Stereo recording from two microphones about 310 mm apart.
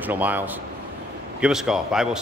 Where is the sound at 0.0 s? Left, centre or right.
Centre.